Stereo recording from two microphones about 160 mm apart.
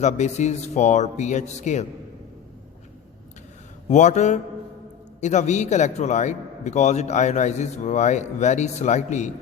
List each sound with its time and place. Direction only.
0.0 s a man's voice: 45° left (ahead or behind)
3.8 s a man's voice: 50° left (ahead or behind)